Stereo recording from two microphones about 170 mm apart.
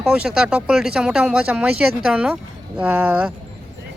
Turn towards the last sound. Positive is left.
turn(degrees=-5)  # may be behind; listen again after turning